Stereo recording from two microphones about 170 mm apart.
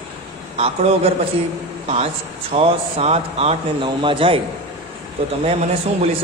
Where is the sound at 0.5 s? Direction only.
35° right (ahead or behind).